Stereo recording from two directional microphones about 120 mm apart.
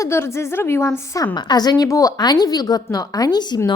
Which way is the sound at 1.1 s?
35° left (ahead or behind).